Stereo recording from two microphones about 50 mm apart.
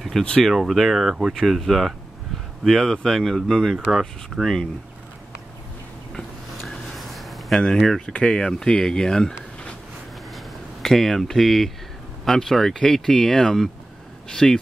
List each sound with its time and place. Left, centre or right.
0.2 s speech: centre
1.3 s speech: centre
6.6 s a sound: centre
7.6 s speech: centre
10.3 s speech: centre